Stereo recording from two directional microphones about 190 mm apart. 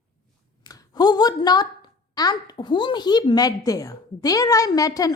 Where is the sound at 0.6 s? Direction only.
20° left (ahead or behind).